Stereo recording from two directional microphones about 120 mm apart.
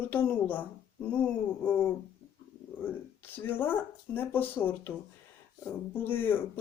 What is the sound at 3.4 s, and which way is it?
Speech, 15° left (ahead or behind).